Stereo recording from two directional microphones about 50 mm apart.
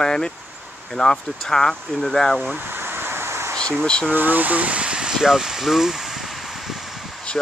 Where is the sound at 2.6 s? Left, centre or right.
Right.